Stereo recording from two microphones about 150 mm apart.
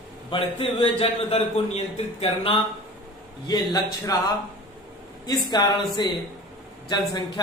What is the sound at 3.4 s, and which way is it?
A man's voice, 25° left (ahead or behind).